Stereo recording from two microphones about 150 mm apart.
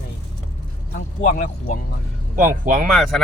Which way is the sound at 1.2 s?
55° left (ahead or behind).